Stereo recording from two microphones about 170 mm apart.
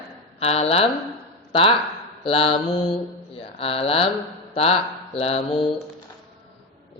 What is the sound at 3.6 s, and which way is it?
A man's voice, 35° left (ahead or behind).